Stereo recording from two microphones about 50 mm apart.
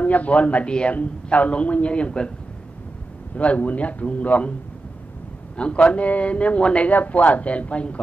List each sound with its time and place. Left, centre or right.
0.0 s a man's voice: left
3.3 s a man's voice: left
5.6 s a man's voice: left